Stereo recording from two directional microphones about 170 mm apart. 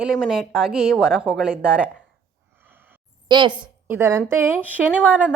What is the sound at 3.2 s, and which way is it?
Speech, 25° right (ahead or behind).